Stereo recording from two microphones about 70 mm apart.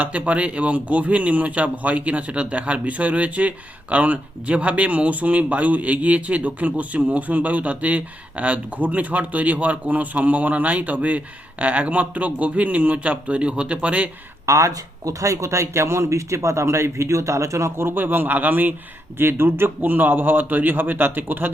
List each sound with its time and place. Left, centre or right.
0.0 s speech: right
14.4 s speech: right